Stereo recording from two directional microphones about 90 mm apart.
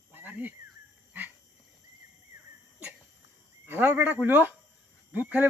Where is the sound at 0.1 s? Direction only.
20° right (ahead or behind).